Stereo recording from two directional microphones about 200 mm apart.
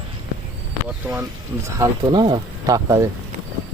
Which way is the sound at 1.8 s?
20° right (ahead or behind).